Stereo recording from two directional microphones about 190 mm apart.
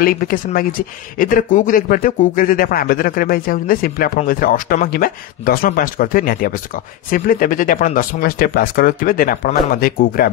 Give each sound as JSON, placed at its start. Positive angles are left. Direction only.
{"t": 0.0, "sound": "speech", "side_deg": 50}